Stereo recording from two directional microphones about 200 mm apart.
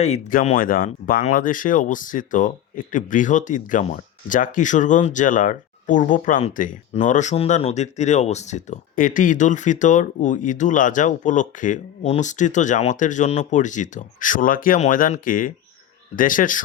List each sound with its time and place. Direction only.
0.0 s speech: 35° left (ahead or behind)